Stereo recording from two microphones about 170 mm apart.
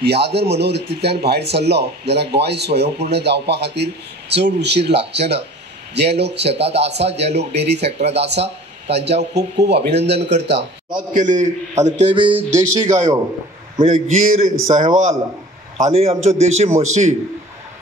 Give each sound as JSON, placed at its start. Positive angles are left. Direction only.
{"t": 0.0, "sound": "a man's voice", "side_deg": -75}
{"t": 11.0, "sound": "a man's voice", "side_deg": -45}
{"t": 12.1, "sound": "speech", "side_deg": -30}
{"t": 12.6, "sound": "a man's voice", "side_deg": -45}